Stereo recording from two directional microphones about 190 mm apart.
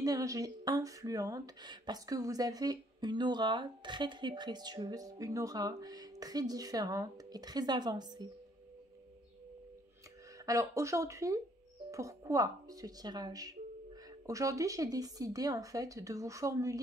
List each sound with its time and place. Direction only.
0.0 s speech: 20° right (ahead or behind)
10.4 s speech: 15° right (ahead or behind)